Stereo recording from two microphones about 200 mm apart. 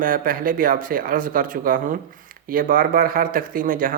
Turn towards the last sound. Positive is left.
turn(degrees=-45)  # may be behind; listen again after turning